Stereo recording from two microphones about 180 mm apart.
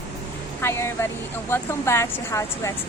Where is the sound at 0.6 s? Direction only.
15° left (ahead or behind).